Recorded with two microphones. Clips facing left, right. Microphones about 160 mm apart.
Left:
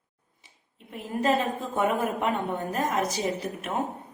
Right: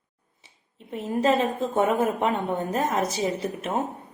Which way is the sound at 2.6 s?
20° right (ahead or behind).